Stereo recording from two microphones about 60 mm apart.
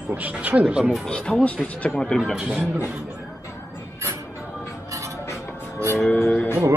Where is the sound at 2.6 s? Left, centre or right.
Right.